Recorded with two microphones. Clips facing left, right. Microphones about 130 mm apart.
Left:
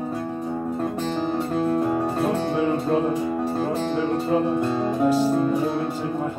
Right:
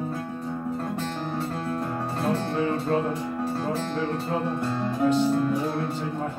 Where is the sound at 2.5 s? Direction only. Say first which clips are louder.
Left 4 dB; 5° left (ahead or behind).